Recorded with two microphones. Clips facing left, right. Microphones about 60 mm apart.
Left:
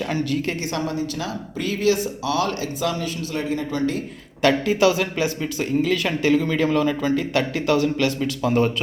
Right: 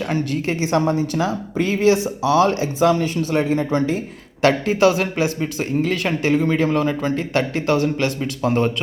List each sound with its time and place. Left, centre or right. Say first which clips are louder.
0.0 s a woman's voice: right 1 dB; right